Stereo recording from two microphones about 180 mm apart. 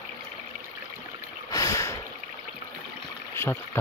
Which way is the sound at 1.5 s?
20° left (ahead or behind).